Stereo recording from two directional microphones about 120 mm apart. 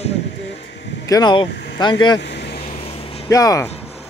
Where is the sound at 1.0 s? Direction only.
30° left (ahead or behind).